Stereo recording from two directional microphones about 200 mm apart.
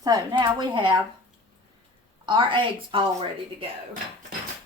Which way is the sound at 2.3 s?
25° right (ahead or behind).